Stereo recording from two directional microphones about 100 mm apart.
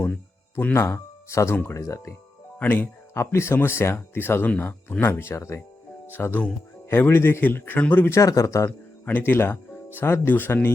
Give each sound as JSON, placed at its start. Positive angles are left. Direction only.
{"t": 0.0, "sound": "speech", "side_deg": 20}
{"t": 9.0, "sound": "speech", "side_deg": 20}